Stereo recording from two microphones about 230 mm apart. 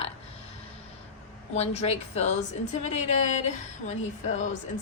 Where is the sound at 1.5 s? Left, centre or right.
Left.